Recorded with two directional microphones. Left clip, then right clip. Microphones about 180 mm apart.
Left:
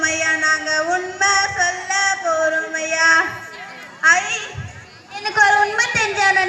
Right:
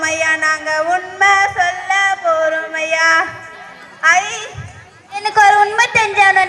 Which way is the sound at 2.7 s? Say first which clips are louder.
Right 2 dB; 45° right (ahead or behind).